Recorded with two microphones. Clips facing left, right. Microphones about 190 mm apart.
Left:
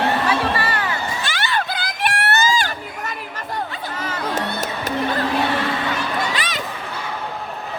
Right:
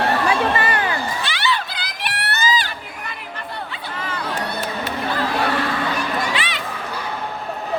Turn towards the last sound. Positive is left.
turn(degrees=40)  # may be behind; listen again after turning